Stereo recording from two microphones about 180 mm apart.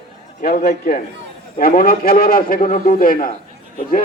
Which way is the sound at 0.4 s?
60° left (ahead or behind).